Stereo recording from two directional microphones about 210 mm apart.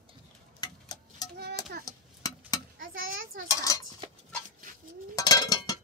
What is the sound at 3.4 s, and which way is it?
Dishes, 15° left (ahead or behind).